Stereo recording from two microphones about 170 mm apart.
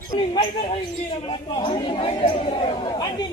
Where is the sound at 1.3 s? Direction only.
30° left (ahead or behind).